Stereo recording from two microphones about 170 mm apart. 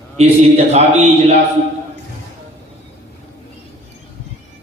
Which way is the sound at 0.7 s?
40° right (ahead or behind).